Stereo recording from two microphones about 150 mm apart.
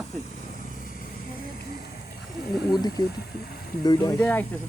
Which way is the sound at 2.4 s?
90° left.